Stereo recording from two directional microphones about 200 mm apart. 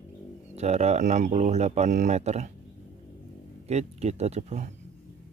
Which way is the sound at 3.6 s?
35° right (ahead or behind).